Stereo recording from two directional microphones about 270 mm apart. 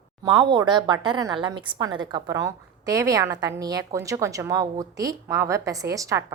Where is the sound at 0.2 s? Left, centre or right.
Centre.